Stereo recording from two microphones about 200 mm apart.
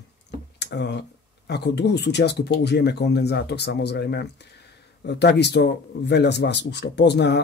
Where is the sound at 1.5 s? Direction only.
55° left (ahead or behind).